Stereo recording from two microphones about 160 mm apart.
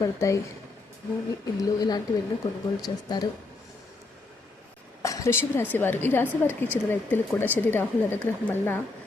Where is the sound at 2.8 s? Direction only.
25° left (ahead or behind).